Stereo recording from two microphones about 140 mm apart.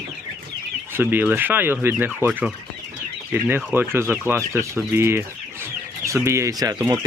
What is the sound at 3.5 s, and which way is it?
Speech, 15° right (ahead or behind).